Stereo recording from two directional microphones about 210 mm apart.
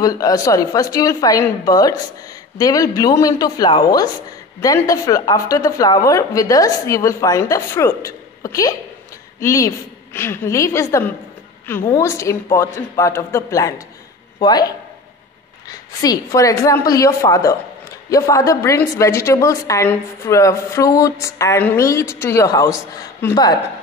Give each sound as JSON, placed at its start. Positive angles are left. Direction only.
{"t": 0.0, "sound": "a woman's voice", "side_deg": 15}
{"t": 15.7, "sound": "a woman's voice", "side_deg": 15}